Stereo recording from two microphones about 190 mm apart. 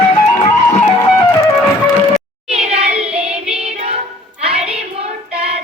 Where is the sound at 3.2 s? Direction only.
5° right (ahead or behind).